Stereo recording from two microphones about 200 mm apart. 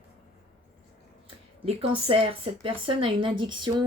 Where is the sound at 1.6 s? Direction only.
25° right (ahead or behind).